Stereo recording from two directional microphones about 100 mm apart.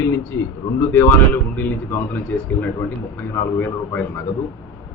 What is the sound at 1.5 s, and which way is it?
Speech, 20° left (ahead or behind).